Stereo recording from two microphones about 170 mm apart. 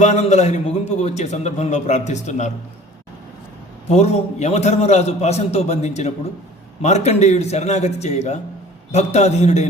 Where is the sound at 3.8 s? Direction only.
40° left (ahead or behind).